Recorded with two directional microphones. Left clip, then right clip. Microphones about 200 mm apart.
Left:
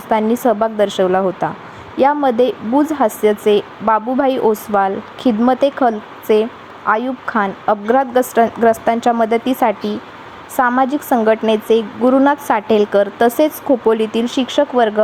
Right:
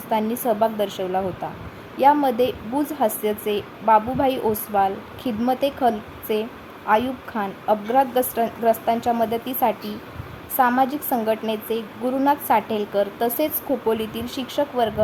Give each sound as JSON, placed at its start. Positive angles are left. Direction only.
{"t": 0.1, "sound": "a woman's voice", "side_deg": 20}